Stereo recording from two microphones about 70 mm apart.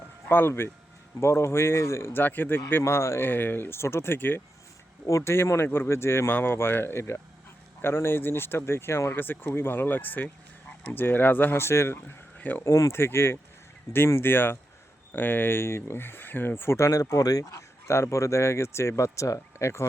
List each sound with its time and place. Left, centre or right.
0.3 s speech: left
2.2 s speech: left
3.2 s speech: left
5.0 s speech: left
12.6 s speech: left
13.0 s speech: left
17.8 s speech: left